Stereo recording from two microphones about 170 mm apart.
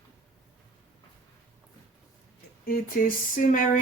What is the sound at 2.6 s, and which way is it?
Speech, 60° left (ahead or behind).